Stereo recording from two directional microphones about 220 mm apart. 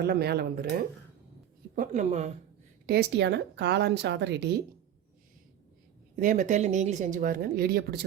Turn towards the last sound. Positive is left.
turn(degrees=-45)  # may be behind; listen again after turning